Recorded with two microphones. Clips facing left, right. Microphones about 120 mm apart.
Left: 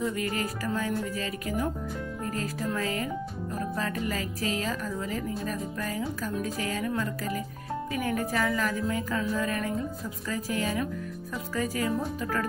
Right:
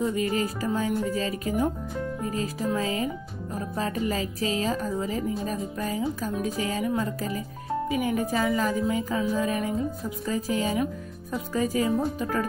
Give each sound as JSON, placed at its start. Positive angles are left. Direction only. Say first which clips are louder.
{"t": 0.0, "sound": "speech", "louder": "right 4 dB", "side_deg": -25}